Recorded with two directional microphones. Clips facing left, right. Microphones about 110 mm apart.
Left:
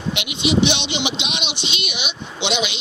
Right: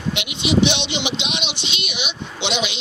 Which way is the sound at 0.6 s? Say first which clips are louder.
Even; 15° left (ahead or behind).